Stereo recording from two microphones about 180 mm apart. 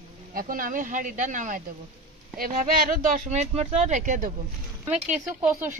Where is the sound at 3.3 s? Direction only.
40° right (ahead or behind).